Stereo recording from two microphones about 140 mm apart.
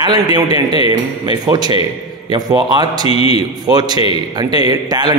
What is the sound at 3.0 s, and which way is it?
Speech, 40° left (ahead or behind).